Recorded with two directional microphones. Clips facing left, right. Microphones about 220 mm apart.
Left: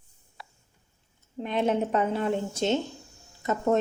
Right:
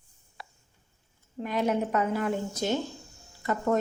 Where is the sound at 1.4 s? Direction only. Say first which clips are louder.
Left 1 dB; 25° left (ahead or behind).